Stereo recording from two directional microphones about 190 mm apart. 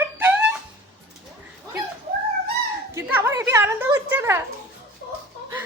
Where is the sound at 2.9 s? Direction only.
10° right (ahead or behind).